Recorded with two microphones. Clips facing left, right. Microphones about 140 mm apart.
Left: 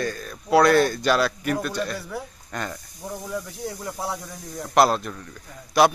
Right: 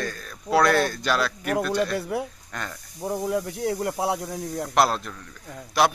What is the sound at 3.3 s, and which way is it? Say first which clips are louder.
Speech: right 6 dB; 70° right (ahead or behind).